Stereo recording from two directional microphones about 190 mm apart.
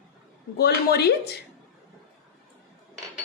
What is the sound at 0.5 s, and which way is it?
Speech, 55° left (ahead or behind).